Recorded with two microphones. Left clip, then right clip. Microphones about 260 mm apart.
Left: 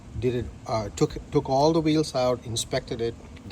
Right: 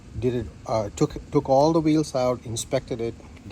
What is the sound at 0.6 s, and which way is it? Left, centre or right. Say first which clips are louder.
Speech: right 4 dB; right.